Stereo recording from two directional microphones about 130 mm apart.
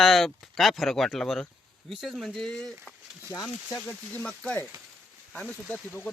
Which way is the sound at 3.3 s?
25° left (ahead or behind).